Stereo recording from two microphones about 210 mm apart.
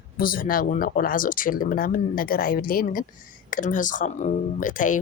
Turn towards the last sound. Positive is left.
turn(degrees=40)  # may be behind; listen again after turning